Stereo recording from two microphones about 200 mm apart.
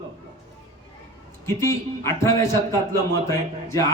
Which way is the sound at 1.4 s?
15° left (ahead or behind).